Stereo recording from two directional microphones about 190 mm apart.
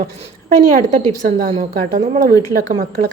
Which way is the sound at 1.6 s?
45° right (ahead or behind).